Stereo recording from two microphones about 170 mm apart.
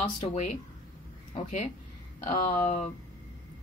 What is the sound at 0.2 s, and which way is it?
Speech, 40° left (ahead or behind).